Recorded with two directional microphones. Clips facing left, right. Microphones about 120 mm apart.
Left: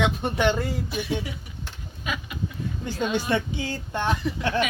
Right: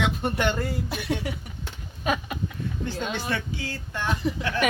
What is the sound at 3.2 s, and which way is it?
Speech, 20° left (ahead or behind).